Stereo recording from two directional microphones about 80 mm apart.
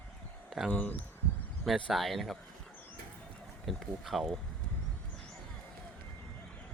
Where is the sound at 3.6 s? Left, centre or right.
Centre.